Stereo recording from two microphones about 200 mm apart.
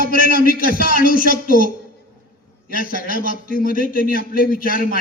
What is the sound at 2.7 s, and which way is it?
A man's voice, 45° left (ahead or behind).